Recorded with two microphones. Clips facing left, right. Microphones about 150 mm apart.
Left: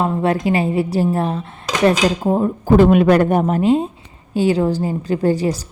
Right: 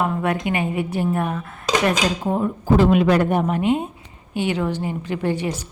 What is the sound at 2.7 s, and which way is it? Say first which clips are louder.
Speech: left 5 dB; 50° left (ahead or behind).